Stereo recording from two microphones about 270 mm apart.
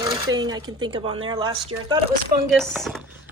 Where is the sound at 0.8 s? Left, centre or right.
Centre.